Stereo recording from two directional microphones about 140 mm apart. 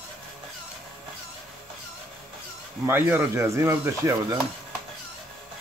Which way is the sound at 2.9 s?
15° right (ahead or behind).